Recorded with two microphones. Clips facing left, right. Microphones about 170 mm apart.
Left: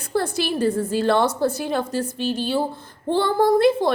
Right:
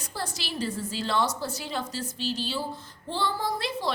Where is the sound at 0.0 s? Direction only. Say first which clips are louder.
Left 13 dB; 55° left (ahead or behind).